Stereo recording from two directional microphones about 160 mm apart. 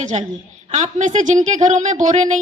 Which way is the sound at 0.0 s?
50° right (ahead or behind).